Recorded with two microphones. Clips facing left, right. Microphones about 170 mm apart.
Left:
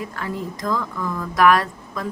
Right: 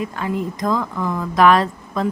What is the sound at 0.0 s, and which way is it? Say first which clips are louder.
Speech: right 5 dB; 20° right (ahead or behind).